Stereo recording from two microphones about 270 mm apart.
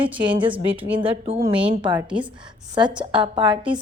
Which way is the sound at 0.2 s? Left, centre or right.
Centre.